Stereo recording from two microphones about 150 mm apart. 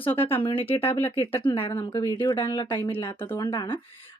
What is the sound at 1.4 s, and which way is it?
Speech, 35° left (ahead or behind).